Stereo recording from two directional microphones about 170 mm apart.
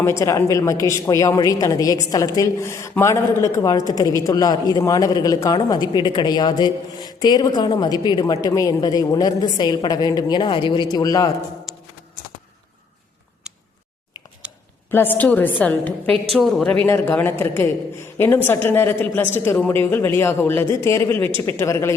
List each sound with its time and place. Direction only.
0.0 s a woman's voice: 15° left (ahead or behind)
14.4 s a sound: 5° right (ahead or behind)
14.8 s a woman's voice: 10° left (ahead or behind)